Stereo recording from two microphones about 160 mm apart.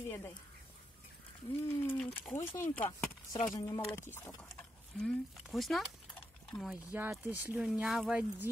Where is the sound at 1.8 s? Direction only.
15° left (ahead or behind).